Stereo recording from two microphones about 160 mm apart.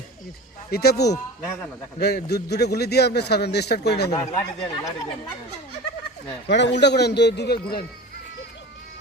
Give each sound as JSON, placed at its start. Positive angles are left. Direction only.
{"t": 0.7, "sound": "a man's voice", "side_deg": 90}
{"t": 4.4, "sound": "speech", "side_deg": 25}
{"t": 6.5, "sound": "a man's voice", "side_deg": 90}